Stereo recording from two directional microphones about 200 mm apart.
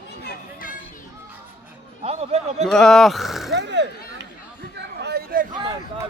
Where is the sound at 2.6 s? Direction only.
Centre (ahead or behind).